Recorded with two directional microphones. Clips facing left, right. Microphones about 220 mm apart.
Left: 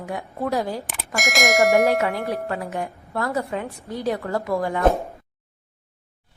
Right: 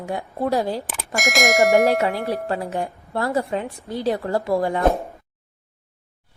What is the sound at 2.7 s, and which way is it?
A woman's voice, 30° right (ahead or behind).